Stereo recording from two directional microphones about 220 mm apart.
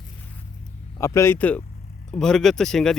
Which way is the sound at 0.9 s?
15° left (ahead or behind).